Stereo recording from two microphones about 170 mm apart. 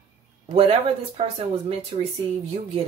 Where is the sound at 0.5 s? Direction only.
35° right (ahead or behind).